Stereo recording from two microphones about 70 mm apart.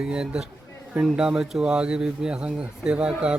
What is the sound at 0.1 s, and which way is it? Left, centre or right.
Speech, centre.